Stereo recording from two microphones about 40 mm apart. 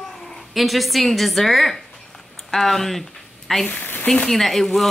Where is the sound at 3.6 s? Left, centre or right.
Left.